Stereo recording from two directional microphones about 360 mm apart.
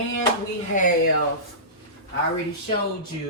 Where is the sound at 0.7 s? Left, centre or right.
Left.